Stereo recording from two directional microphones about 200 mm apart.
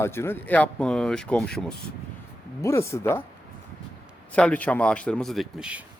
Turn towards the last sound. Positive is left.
turn(degrees=-5)  # may be behind; listen again after turning